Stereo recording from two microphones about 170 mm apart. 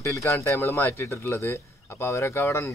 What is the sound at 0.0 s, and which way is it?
Speech, 15° left (ahead or behind).